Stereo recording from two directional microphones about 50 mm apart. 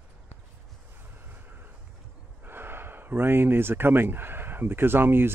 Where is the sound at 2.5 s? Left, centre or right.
Right.